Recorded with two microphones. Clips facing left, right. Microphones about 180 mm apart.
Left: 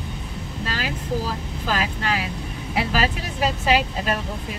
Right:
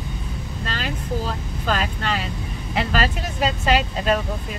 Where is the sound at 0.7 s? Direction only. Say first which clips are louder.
Even; 5° left (ahead or behind).